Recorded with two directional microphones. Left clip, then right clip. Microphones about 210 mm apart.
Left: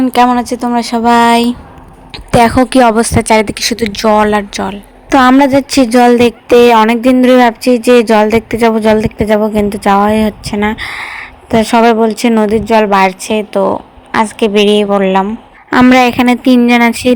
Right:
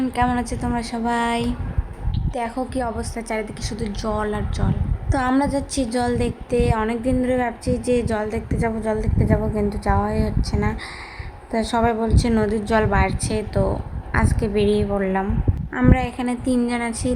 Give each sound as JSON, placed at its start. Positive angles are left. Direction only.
{"t": 0.3, "sound": "a woman's voice", "side_deg": 35}
{"t": 15.7, "sound": "a woman's voice", "side_deg": 40}